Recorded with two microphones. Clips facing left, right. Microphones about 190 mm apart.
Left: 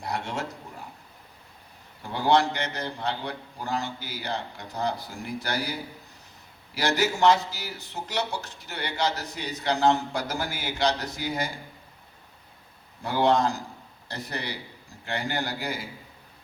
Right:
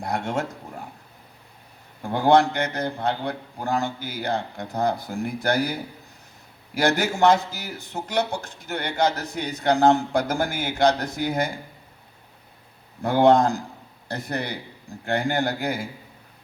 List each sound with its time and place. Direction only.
0.0 s a man's voice: 50° right (ahead or behind)
2.0 s a man's voice: 50° right (ahead or behind)
6.7 s a man's voice: 50° right (ahead or behind)
13.0 s a man's voice: 50° right (ahead or behind)